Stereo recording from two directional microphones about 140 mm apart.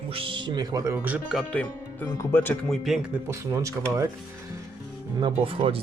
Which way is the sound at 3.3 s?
20° right (ahead or behind).